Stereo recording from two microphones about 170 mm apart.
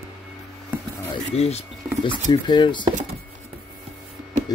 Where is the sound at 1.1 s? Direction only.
35° left (ahead or behind).